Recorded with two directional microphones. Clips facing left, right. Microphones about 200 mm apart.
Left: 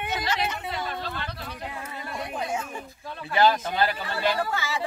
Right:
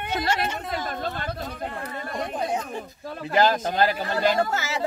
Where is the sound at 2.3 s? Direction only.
35° right (ahead or behind).